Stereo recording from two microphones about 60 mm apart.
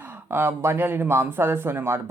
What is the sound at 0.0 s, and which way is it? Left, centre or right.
Speech, right.